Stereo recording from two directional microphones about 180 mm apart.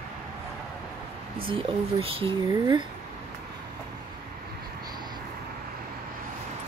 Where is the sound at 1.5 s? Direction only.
30° right (ahead or behind).